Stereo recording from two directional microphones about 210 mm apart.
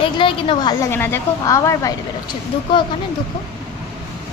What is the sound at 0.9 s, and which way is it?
A woman's voice, 10° left (ahead or behind).